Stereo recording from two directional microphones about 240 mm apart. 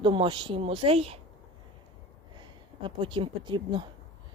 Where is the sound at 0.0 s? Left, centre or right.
Right.